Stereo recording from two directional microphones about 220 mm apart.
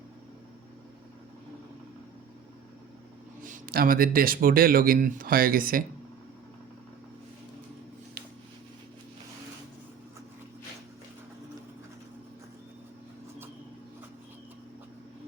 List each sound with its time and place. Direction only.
3.4 s speech: 40° right (ahead or behind)